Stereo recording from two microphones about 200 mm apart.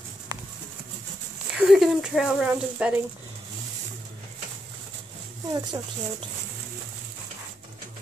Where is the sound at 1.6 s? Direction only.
Centre (ahead or behind).